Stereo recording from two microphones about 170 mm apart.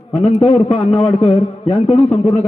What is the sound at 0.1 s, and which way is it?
A man's voice, 40° left (ahead or behind).